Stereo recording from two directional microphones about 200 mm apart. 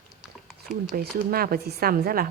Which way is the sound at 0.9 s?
50° right (ahead or behind).